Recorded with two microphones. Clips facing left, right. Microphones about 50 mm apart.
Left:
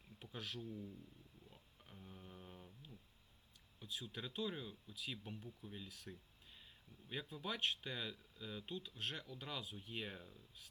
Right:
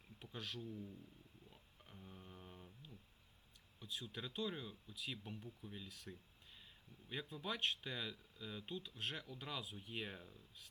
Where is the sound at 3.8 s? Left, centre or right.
Centre.